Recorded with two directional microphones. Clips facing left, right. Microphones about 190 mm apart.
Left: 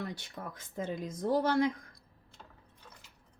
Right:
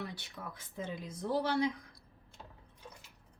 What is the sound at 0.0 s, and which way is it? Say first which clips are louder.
Speech: left 3 dB; 45° left (ahead or behind).